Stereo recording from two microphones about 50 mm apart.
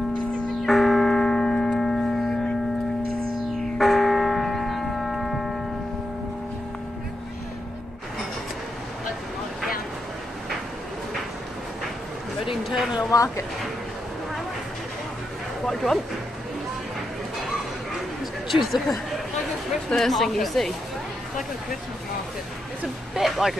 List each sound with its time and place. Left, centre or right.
0.6 s church bell: centre
3.5 s church bell: centre
12.4 s a sound: centre
15.6 s speech: centre
18.5 s speech: centre
23.1 s speech: centre